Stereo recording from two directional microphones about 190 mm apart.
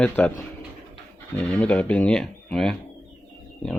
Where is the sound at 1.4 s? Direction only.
5° left (ahead or behind).